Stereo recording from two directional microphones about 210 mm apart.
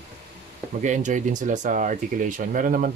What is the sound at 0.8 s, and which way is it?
Speech, 35° right (ahead or behind).